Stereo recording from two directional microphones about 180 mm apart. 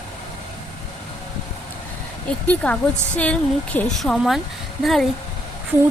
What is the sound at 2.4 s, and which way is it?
A woman's voice, 5° left (ahead or behind).